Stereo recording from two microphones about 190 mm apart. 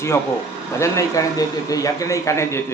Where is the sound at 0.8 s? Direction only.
15° left (ahead or behind).